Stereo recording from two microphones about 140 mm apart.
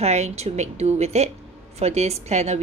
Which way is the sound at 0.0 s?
50° right (ahead or behind).